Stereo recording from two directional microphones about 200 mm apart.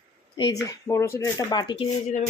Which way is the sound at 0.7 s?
15° left (ahead or behind).